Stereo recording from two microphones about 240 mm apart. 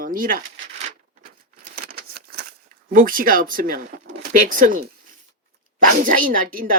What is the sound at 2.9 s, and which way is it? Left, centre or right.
Speech, right.